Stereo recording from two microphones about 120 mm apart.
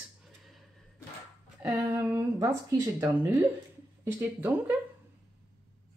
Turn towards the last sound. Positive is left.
turn(degrees=-15)  # may be behind; listen again after turning